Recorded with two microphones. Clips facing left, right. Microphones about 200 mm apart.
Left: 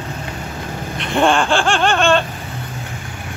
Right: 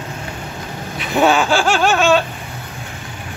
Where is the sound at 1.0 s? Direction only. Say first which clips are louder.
Right 1 dB; 5° right (ahead or behind).